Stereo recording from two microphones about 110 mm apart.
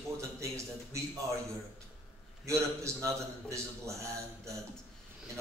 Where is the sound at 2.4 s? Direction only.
25° right (ahead or behind).